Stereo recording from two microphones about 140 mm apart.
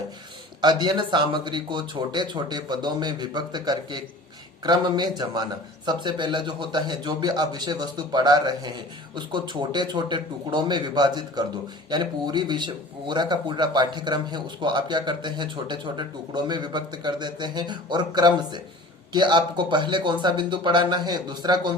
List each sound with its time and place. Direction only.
0.6 s speech: 30° right (ahead or behind)